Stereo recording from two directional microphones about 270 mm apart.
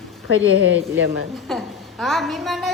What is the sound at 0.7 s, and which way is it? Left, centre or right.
Speech, right.